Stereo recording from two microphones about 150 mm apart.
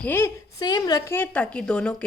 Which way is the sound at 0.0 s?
15° left (ahead or behind).